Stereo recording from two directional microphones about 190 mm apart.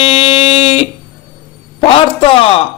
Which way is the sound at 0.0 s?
30° left (ahead or behind).